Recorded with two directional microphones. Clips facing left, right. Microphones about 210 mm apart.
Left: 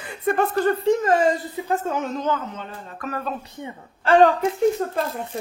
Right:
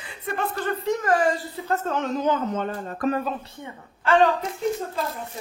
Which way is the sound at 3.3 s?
15° left (ahead or behind).